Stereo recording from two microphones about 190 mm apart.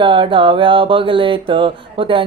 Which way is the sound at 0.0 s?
25° right (ahead or behind).